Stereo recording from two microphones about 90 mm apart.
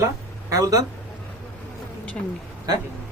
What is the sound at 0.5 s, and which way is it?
Speech, 40° right (ahead or behind).